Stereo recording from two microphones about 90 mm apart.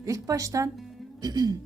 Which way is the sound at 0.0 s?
40° right (ahead or behind).